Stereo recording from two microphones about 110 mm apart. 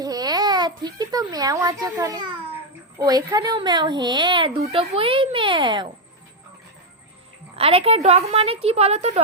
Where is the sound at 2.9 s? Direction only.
35° right (ahead or behind).